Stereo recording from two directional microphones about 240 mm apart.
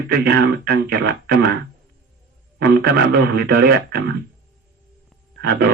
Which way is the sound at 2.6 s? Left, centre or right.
Right.